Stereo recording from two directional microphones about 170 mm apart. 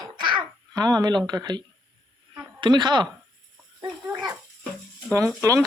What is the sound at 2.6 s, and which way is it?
Speech, 25° right (ahead or behind).